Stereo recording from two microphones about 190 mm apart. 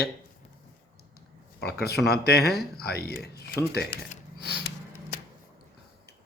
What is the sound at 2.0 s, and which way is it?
A man's voice, 55° left (ahead or behind).